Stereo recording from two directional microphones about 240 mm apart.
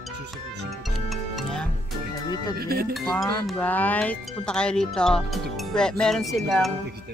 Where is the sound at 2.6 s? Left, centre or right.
Right.